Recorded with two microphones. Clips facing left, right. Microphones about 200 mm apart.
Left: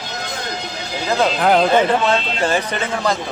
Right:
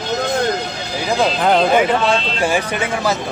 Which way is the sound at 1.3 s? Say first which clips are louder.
Left 1 dB; centre (ahead or behind).